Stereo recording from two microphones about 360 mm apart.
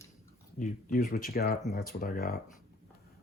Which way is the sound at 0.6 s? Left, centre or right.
Left.